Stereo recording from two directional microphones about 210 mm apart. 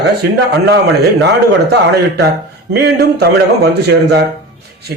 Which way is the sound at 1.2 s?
50° right (ahead or behind).